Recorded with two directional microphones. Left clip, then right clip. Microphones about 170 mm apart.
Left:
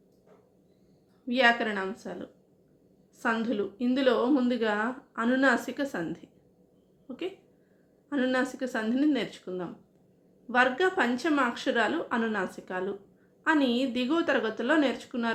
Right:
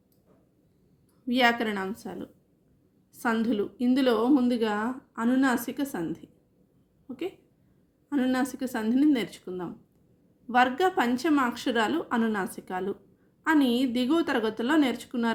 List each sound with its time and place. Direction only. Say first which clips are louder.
1.3 s a woman's voice: even; 45° right (ahead or behind)
8.1 s a woman's voice: even; 40° right (ahead or behind)